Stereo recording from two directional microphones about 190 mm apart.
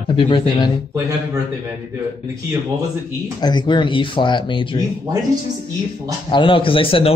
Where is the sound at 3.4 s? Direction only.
25° left (ahead or behind).